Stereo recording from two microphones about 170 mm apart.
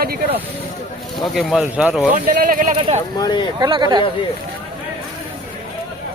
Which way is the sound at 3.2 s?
25° left (ahead or behind).